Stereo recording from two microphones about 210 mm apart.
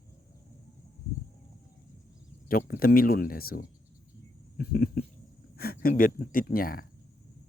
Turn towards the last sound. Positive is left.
turn(degrees=45)  # may be behind; listen again after turning